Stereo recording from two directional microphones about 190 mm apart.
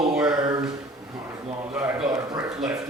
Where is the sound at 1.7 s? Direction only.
5° right (ahead or behind).